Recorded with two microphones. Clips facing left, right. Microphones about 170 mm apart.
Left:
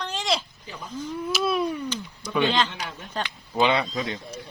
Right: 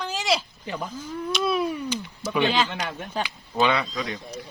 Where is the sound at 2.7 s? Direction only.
60° right (ahead or behind).